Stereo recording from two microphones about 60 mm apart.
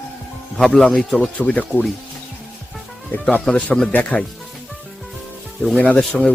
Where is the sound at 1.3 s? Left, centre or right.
Left.